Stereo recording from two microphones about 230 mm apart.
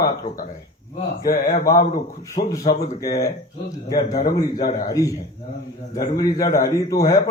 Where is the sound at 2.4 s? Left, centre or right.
Centre.